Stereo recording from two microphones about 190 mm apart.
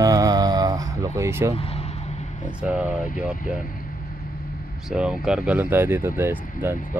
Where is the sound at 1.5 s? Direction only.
30° left (ahead or behind).